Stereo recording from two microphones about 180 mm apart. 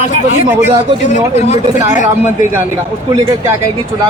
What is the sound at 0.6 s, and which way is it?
Speech, 40° left (ahead or behind).